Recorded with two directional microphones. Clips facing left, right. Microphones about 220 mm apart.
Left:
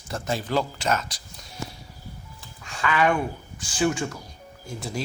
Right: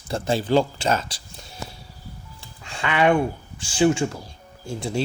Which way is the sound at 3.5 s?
30° right (ahead or behind).